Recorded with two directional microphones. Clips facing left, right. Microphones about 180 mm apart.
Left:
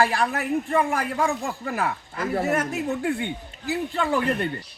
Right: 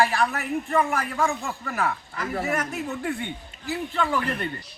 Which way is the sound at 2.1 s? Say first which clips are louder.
Left 7 dB; 30° left (ahead or behind).